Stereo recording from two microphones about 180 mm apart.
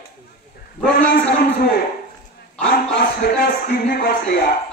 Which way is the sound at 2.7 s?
55° left (ahead or behind).